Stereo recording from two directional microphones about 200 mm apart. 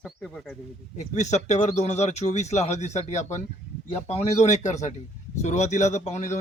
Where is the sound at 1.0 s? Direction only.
35° left (ahead or behind).